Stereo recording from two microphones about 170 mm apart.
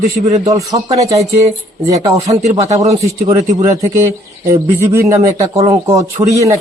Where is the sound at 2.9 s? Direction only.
20° right (ahead or behind).